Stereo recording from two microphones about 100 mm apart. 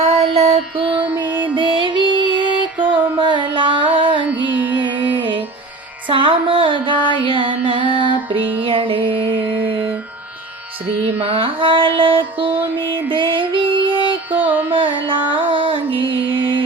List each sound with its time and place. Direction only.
0.3 s mantra: 90° right; by 1.0 s 65° right (ahead or behind)
1.3 s music: 15° right (ahead or behind)
1.5 s music: 55° right (ahead or behind)
4.2 s music: 15° right (ahead or behind)
6.1 s music: 60° right (ahead or behind)
11.0 s music: 70° right (ahead or behind)
14.3 s carnatic music: 15° right (ahead or behind)
14.8 s carnatic music: 55° right (ahead or behind)
15.3 s music: 60° right (ahead or behind)